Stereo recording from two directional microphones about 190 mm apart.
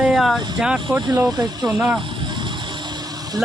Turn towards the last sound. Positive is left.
turn(degrees=-20)  # may be behind; listen again after turning